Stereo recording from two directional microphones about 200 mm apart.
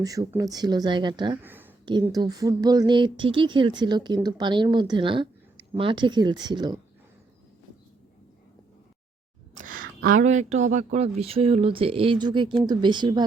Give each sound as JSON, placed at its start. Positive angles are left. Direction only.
{"t": 0.0, "sound": "speech", "side_deg": -15}
{"t": 1.4, "sound": "a sound", "side_deg": -10}
{"t": 1.8, "sound": "speech", "side_deg": -20}
{"t": 9.6, "sound": "speech", "side_deg": -45}